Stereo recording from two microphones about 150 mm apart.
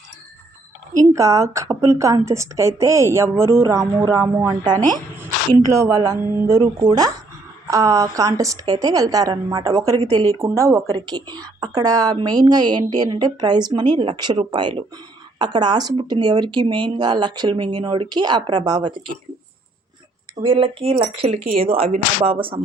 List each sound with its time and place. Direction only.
0.9 s a woman's voice: 20° right (ahead or behind)
20.4 s speech: 35° right (ahead or behind)